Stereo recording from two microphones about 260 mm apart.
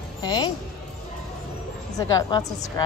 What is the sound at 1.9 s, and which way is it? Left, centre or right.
Speech, centre.